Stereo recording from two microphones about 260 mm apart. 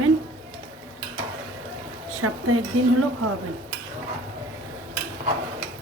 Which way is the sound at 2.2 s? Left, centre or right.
Right.